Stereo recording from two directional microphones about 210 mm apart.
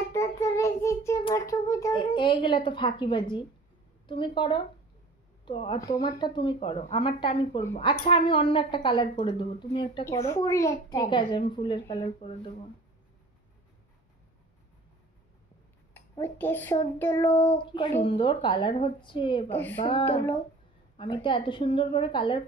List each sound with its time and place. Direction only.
0.1 s child singing: 15° left (ahead or behind)
1.2 s a woman's voice: 15° left (ahead or behind)
15.9 s speech: 10° left (ahead or behind)
18.0 s a woman's voice: 25° left (ahead or behind)